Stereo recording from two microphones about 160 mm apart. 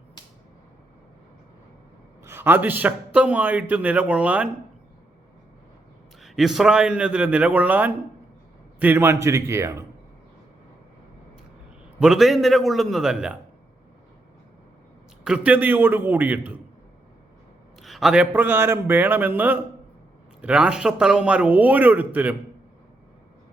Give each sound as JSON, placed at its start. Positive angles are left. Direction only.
{"t": 2.2, "sound": "a man's voice", "side_deg": -15}
{"t": 6.2, "sound": "a man's voice", "side_deg": 0}
{"t": 11.9, "sound": "a man's voice", "side_deg": -5}
{"t": 15.2, "sound": "a man's voice", "side_deg": -5}
{"t": 17.8, "sound": "a man's voice", "side_deg": 0}